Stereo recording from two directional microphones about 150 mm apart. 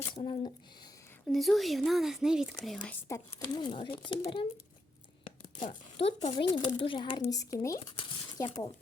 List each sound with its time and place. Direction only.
0.2 s speech: 35° left (ahead or behind)
1.3 s speech: centre (ahead or behind)
3.1 s speech: 30° left (ahead or behind)
6.0 s speech: 40° left (ahead or behind)
6.3 s speech: 30° left (ahead or behind)
7.9 s speech: 35° left (ahead or behind)